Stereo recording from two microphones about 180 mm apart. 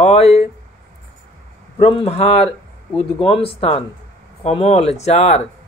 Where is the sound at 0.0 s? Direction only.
35° left (ahead or behind).